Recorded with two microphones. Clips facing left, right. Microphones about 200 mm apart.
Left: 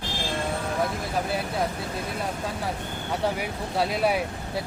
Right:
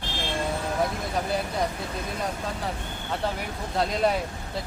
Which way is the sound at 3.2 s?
10° left (ahead or behind).